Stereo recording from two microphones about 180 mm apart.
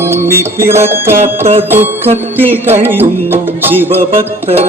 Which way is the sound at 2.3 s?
10° right (ahead or behind).